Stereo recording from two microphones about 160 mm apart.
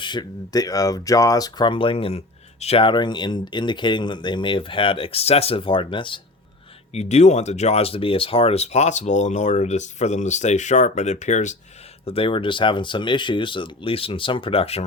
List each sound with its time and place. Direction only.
0.0 s speech: 30° left (ahead or behind)
6.9 s speech: 45° left (ahead or behind)
12.0 s speech: 35° left (ahead or behind)